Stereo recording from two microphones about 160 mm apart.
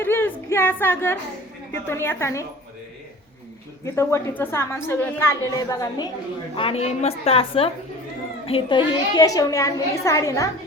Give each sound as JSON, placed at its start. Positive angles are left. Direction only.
{"t": 0.0, "sound": "a sound", "side_deg": 15}
{"t": 1.9, "sound": "a woman's voice", "side_deg": 15}
{"t": 3.8, "sound": "a woman's voice", "side_deg": 15}
{"t": 6.6, "sound": "a woman's voice", "side_deg": 35}